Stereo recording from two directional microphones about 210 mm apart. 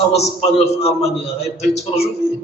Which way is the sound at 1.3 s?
30° left (ahead or behind).